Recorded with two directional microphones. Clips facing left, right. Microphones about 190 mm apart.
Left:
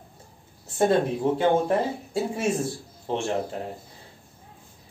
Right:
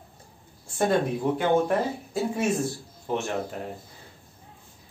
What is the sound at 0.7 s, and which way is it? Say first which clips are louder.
Speech: left 2 dB; 25° left (ahead or behind).